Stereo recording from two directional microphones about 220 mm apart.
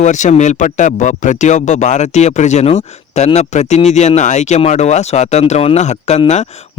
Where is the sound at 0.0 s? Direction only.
35° left (ahead or behind).